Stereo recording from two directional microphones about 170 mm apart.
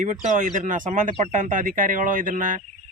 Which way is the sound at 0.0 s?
45° right (ahead or behind).